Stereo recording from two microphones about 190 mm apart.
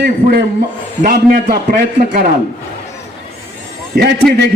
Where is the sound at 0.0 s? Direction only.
55° right (ahead or behind).